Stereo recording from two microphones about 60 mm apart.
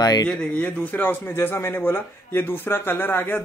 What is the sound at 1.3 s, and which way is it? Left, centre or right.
Speech, left.